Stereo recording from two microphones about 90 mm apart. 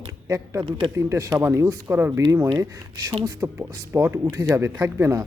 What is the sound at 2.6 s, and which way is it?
Speech, 40° right (ahead or behind).